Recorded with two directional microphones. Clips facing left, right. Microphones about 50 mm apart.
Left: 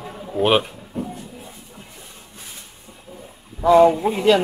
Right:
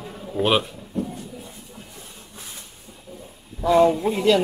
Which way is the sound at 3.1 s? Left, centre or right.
Centre.